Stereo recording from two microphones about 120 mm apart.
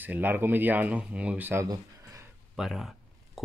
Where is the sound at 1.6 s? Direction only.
30° right (ahead or behind).